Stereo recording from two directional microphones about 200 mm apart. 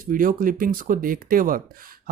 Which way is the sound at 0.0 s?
45° right (ahead or behind).